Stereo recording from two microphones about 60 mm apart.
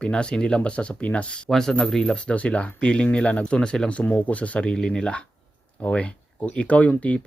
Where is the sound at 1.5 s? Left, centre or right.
Centre.